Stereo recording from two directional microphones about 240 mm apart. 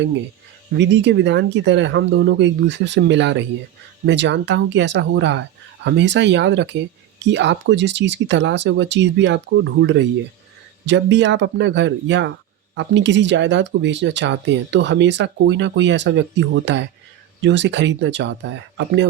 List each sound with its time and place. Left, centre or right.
0.8 s speech: right